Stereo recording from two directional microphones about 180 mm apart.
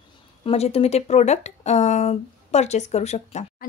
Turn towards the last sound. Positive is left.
turn(degrees=40)  # may be behind; listen again after turning